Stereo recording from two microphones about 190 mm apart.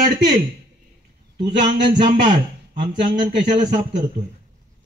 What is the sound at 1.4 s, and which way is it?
A man's voice, 40° right (ahead or behind).